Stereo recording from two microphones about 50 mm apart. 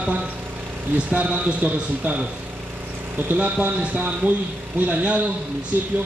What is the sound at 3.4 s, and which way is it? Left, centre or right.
Speech, right.